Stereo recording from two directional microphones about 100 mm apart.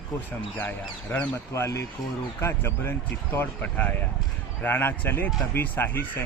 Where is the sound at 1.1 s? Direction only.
25° left (ahead or behind).